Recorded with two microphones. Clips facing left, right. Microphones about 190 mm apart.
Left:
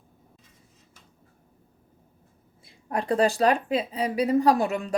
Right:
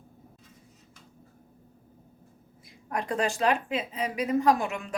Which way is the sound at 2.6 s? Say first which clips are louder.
Left 5 dB; 30° left (ahead or behind).